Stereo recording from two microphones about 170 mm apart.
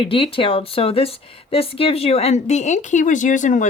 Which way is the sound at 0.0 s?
30° left (ahead or behind).